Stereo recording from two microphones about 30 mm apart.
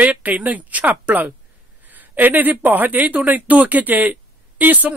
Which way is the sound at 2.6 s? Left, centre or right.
Right.